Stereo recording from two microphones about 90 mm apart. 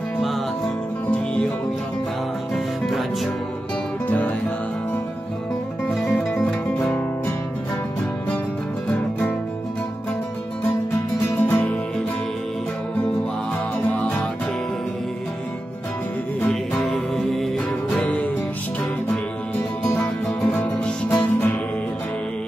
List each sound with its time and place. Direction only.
1.1 s music: 10° left (ahead or behind)
2.5 s music: centre (ahead or behind)
6.0 s music: 15° left (ahead or behind)
11.4 s music: 15° left (ahead or behind)
16.3 s music: 15° left (ahead or behind)
16.9 s music: 5° left (ahead or behind)
17.9 s music: 15° left (ahead or behind)
19.9 s music: 20° left (ahead or behind)
20.4 s music: 5° left (ahead or behind)
21.1 s music: 20° left (ahead or behind)